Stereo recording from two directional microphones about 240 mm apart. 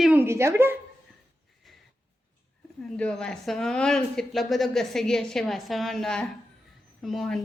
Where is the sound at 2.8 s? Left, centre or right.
Centre.